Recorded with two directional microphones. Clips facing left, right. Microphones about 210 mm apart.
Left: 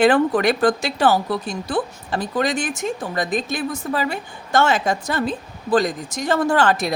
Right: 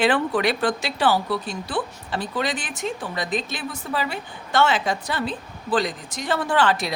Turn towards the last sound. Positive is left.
turn(degrees=45)  # may be behind; listen again after turning